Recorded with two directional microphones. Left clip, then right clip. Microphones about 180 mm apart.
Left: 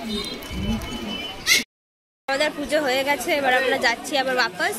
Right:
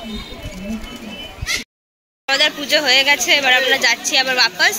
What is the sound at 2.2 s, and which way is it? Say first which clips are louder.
Speech: right 6 dB; 5° left (ahead or behind).